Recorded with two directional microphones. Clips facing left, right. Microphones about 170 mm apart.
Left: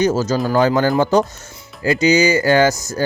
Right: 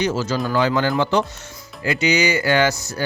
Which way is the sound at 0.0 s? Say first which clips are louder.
Left 5 dB; 40° left (ahead or behind).